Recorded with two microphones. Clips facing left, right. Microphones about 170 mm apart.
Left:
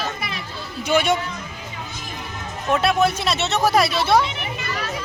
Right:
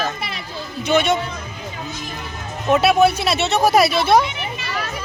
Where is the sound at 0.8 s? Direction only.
10° left (ahead or behind).